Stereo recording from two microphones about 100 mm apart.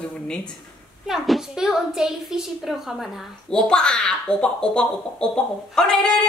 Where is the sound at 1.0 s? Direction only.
5° right (ahead or behind).